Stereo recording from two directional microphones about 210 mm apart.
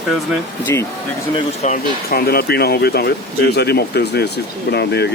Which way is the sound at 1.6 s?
45° left (ahead or behind).